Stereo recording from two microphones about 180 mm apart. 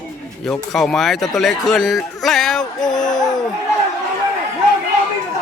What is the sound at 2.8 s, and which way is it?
Music, 20° left (ahead or behind).